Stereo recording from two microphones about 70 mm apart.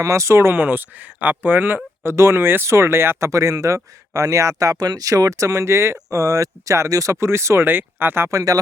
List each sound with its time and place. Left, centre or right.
0.0 s speech: right
7.7 s speech: right